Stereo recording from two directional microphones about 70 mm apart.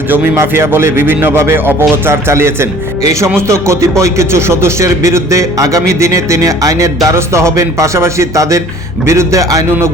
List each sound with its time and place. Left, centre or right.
0.1 s a man's voice: right